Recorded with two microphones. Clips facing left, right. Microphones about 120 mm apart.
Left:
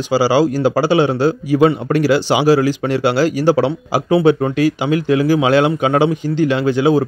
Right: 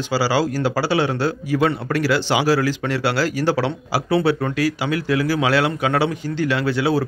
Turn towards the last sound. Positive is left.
turn(degrees=20)  # may be behind; listen again after turning